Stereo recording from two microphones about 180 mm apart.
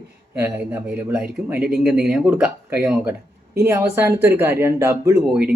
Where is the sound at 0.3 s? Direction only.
10° right (ahead or behind).